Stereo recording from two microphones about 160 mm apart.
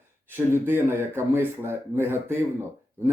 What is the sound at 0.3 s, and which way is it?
Speech, 10° right (ahead or behind).